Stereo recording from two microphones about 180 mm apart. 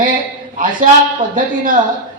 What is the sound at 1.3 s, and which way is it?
Speech, 50° right (ahead or behind).